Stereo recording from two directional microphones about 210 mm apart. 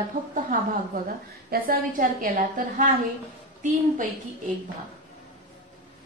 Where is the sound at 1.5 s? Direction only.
45° right (ahead or behind).